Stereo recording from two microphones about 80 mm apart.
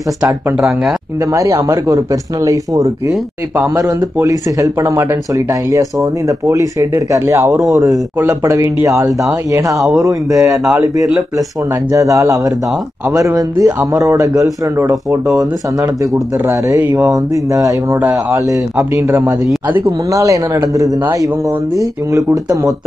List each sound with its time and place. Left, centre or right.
0.6 s speech: centre
1.2 s speech: right
11.9 s speech: right
16.4 s speech: right
16.9 s speech: right